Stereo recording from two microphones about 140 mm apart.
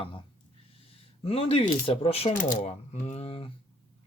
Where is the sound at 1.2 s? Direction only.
45° left (ahead or behind).